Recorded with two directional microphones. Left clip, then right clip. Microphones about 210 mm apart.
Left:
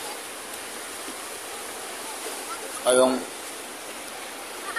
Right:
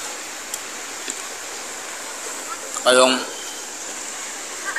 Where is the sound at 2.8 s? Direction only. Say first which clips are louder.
Right 5 dB; 5° left (ahead or behind).